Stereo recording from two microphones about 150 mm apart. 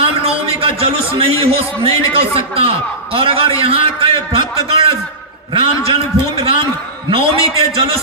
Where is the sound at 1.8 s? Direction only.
40° right (ahead or behind).